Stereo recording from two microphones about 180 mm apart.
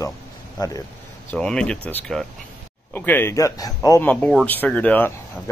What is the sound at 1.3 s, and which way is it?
Speech, 5° left (ahead or behind).